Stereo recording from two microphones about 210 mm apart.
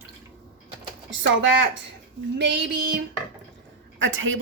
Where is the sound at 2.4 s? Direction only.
55° right (ahead or behind).